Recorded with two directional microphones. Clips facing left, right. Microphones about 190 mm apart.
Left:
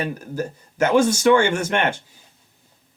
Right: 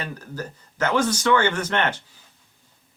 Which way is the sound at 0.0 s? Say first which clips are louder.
Left 6 dB; 10° left (ahead or behind).